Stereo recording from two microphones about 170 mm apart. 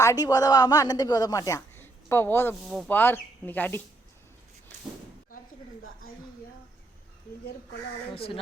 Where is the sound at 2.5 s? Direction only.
Centre (ahead or behind).